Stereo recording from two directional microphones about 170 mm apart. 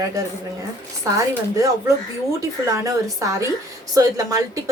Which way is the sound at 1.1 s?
20° right (ahead or behind).